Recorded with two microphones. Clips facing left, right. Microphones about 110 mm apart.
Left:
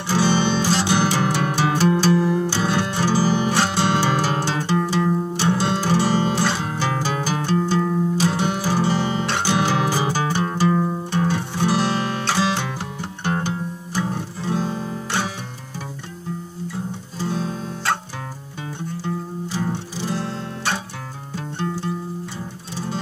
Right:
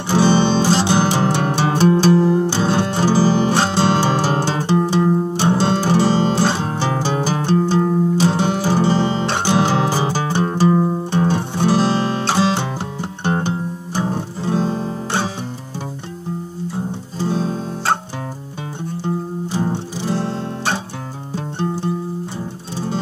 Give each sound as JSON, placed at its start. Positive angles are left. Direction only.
{"t": 0.1, "sound": "music", "side_deg": -30}
{"t": 13.2, "sound": "guitar", "side_deg": -30}
{"t": 17.3, "sound": "guitar", "side_deg": -30}
{"t": 19.0, "sound": "guitar", "side_deg": -30}